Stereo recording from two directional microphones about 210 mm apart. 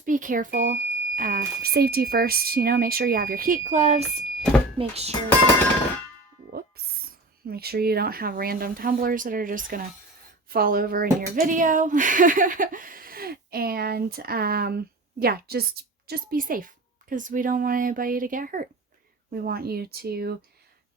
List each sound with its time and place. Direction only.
0.0 s speech: 40° right (ahead or behind)
7.4 s a woman's voice: 50° right (ahead or behind)